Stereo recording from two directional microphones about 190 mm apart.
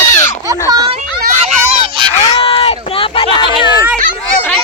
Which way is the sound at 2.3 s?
30° left (ahead or behind).